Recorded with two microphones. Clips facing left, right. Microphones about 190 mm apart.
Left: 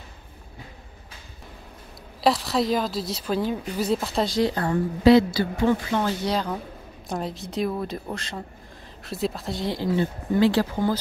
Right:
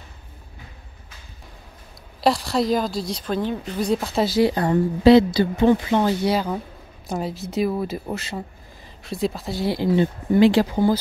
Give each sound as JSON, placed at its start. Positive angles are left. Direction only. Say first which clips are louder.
{"t": 2.2, "sound": "a woman's voice", "louder": "right 2 dB", "side_deg": 0}